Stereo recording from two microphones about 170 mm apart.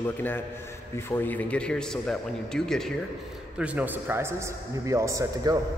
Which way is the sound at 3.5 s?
10° right (ahead or behind).